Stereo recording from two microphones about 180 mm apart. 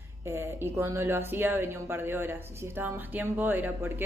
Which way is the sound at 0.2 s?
15° right (ahead or behind).